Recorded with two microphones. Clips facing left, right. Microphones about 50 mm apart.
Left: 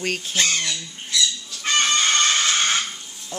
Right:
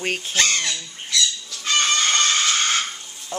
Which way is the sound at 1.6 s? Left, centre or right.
Left.